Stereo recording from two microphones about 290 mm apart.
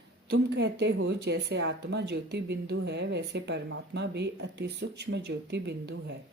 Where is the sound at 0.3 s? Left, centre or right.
Right.